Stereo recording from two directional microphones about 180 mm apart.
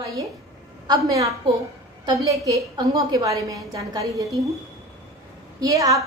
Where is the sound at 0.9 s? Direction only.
20° right (ahead or behind).